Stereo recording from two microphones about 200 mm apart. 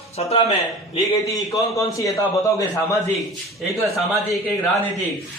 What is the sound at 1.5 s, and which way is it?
A man's voice, 15° left (ahead or behind).